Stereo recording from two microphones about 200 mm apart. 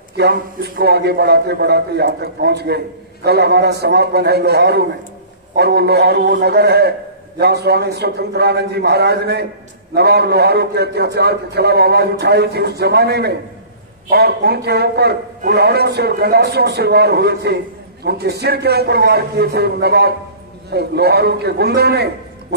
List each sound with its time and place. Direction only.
0.2 s a man's voice: 50° right (ahead or behind)